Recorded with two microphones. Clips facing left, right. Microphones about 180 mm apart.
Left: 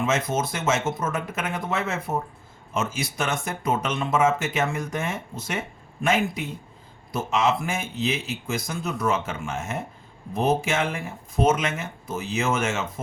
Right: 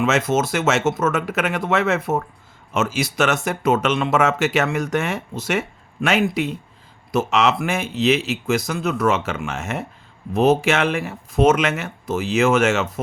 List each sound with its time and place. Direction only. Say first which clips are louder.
0.0 s speech: right 5 dB; 75° right (ahead or behind)